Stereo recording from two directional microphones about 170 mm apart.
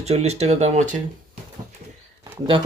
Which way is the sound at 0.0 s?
40° right (ahead or behind).